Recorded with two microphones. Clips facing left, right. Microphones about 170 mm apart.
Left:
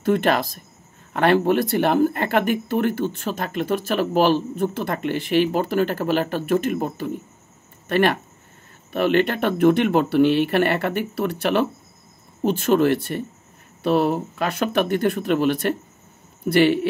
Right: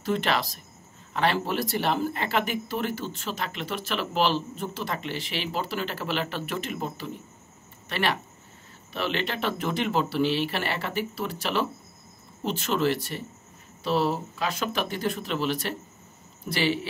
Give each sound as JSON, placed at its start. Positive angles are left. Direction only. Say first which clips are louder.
{"t": 0.0, "sound": "speech", "louder": "left 7 dB", "side_deg": 55}